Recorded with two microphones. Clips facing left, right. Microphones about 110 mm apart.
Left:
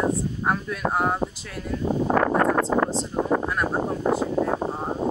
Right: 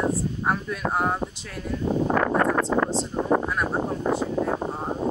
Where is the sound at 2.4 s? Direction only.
30° left (ahead or behind).